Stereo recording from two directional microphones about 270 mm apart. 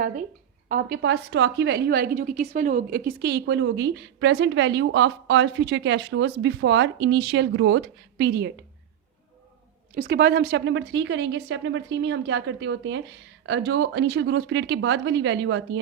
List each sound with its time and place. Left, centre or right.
0.7 s a woman's voice: right
9.9 s a woman's voice: right